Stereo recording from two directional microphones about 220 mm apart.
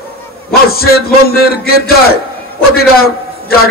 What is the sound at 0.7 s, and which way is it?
A man's voice, 45° left (ahead or behind).